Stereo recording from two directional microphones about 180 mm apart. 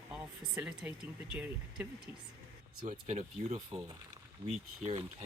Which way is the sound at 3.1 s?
40° right (ahead or behind).